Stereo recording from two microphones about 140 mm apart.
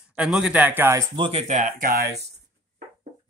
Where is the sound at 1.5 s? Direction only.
75° right (ahead or behind).